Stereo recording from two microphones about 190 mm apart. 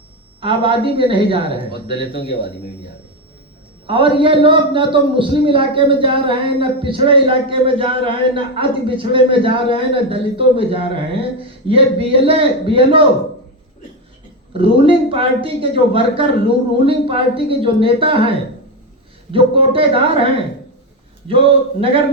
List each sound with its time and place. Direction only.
0.3 s a man's voice: 25° right (ahead or behind)
3.8 s a man's voice: 25° right (ahead or behind)
14.5 s a man's voice: 30° right (ahead or behind)
21.2 s a man's voice: 30° right (ahead or behind)